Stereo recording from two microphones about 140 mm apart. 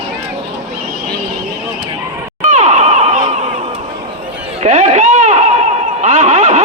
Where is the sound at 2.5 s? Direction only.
55° right (ahead or behind).